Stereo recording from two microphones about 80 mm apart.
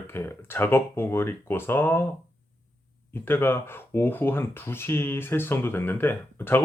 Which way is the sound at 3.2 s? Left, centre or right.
Left.